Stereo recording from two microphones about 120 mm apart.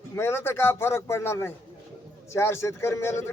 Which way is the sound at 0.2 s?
20° left (ahead or behind).